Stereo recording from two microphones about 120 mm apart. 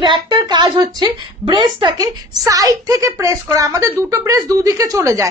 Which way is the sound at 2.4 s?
30° right (ahead or behind).